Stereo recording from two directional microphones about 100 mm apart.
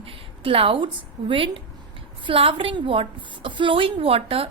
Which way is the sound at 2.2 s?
65° right (ahead or behind).